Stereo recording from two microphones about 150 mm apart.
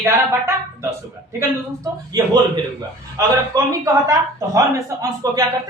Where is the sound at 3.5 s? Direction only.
25° right (ahead or behind).